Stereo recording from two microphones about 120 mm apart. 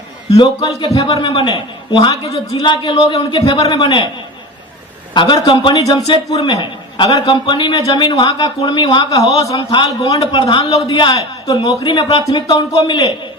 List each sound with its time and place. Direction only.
0.3 s a man's voice: 35° left (ahead or behind)
5.1 s a man's voice: 40° left (ahead or behind)
5.7 s a man's voice: 30° left (ahead or behind)
9.6 s a man's voice: 40° left (ahead or behind)